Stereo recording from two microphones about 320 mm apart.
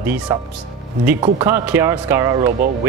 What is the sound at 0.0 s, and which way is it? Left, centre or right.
Speech, centre.